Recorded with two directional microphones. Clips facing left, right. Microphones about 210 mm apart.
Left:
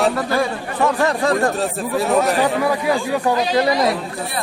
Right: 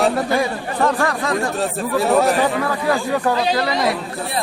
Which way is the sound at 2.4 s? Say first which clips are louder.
Left 1 dB; 10° left (ahead or behind).